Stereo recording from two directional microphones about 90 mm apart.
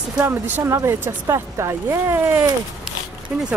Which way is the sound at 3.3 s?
15° right (ahead or behind).